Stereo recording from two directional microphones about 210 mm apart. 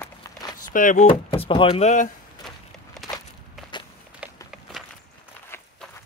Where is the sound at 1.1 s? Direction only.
25° left (ahead or behind).